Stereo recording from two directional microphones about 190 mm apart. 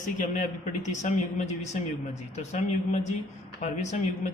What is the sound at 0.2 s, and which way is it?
Speech, 40° left (ahead or behind).